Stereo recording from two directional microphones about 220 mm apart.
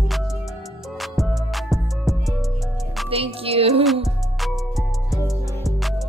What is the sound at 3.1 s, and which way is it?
Music, 25° right (ahead or behind).